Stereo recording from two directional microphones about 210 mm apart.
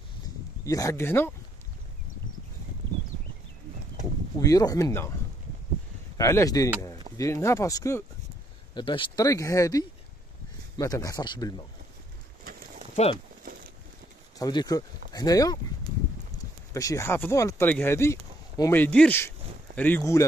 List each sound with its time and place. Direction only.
0.7 s speech: 15° left (ahead or behind)
4.4 s speech: 15° left (ahead or behind)
6.1 s speech: 15° left (ahead or behind)
12.4 s a sound: 45° right (ahead or behind)
12.9 s speech: 30° left (ahead or behind)
14.4 s speech: 20° left (ahead or behind)
16.7 s speech: 15° left (ahead or behind)